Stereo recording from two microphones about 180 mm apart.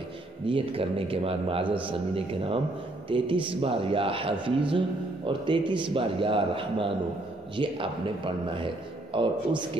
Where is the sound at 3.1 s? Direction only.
30° right (ahead or behind).